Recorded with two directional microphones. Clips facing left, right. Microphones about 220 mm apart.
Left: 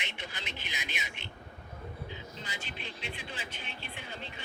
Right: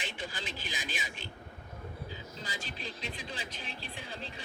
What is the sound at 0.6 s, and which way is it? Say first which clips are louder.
Speech: right 2 dB; 30° right (ahead or behind).